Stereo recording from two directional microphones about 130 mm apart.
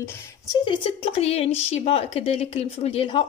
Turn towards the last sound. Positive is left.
turn(degrees=45)  # may be behind; listen again after turning